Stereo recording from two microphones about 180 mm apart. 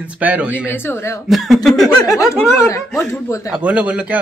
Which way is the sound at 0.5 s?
10° left (ahead or behind).